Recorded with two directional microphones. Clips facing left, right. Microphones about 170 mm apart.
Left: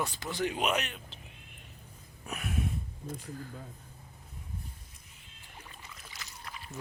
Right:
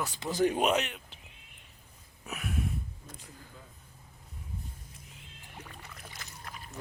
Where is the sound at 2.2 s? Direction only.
Centre (ahead or behind).